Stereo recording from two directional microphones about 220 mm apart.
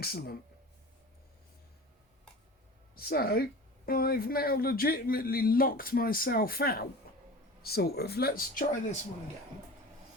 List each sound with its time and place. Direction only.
0.0 s speech: 45° left (ahead or behind)
2.9 s speech: 45° left (ahead or behind)
7.1 s a sound: 45° left (ahead or behind)
7.6 s speech: 45° left (ahead or behind)